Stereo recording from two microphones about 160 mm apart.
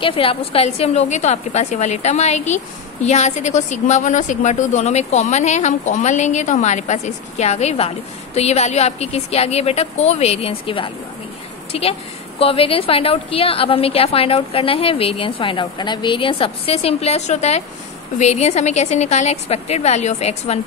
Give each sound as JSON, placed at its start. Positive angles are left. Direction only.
{"t": 0.0, "sound": "a woman's voice", "side_deg": 35}